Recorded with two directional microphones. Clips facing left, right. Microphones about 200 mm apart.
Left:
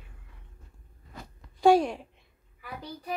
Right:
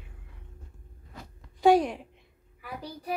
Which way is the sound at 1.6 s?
15° right (ahead or behind).